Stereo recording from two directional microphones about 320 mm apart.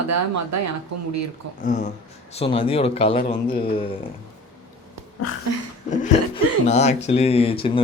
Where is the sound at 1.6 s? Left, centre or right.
Left.